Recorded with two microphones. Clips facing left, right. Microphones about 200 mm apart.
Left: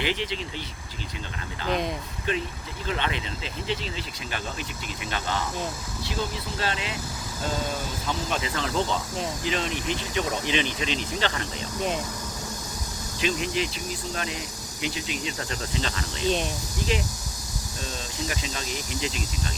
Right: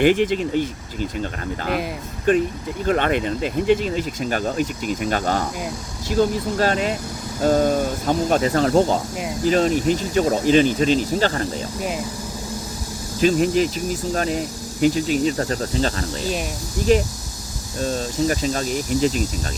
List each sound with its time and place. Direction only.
0.0 s speech: 50° right (ahead or behind)
2.3 s speech: 50° right (ahead or behind)
13.1 s speech: 45° right (ahead or behind)
16.2 s speech: 5° right (ahead or behind)
16.9 s speech: 45° right (ahead or behind)